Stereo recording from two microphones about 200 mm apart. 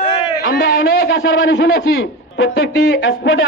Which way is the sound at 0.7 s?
75° left (ahead or behind).